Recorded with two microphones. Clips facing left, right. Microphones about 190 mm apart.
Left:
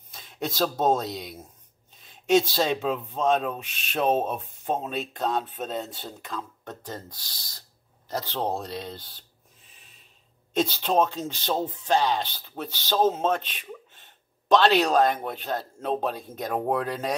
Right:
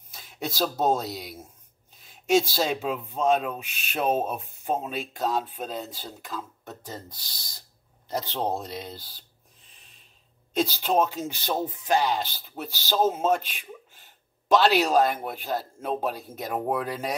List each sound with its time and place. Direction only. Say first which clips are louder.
0.1 s speech: left 2 dB; 5° right (ahead or behind)
10.5 s speech: even; 5° right (ahead or behind)